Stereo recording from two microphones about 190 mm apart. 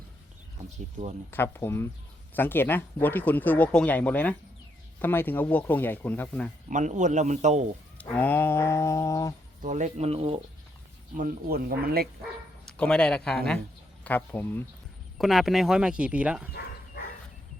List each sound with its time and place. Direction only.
1.3 s speech: 10° left (ahead or behind)
6.7 s a man's voice: 40° right (ahead or behind)
7.9 s a sound: 10° left (ahead or behind)
9.6 s a man's voice: 40° right (ahead or behind)
11.2 s speech: 50° right (ahead or behind)
12.6 s speech: 5° left (ahead or behind)
15.2 s speech: centre (ahead or behind)